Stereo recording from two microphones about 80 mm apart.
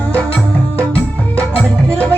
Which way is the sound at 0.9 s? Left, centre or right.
Left.